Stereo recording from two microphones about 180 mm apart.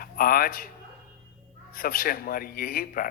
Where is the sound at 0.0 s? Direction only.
55° left (ahead or behind).